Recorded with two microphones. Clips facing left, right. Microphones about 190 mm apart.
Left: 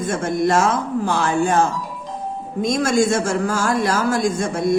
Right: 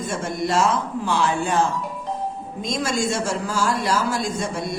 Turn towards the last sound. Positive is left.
turn(degrees=50)  # may be behind; listen again after turning